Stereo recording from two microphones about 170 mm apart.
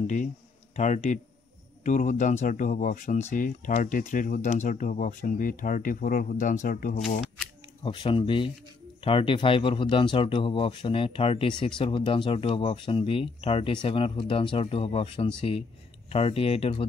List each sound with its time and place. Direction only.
0.0 s speech: 45° left (ahead or behind)
7.8 s a man's voice: 30° left (ahead or behind)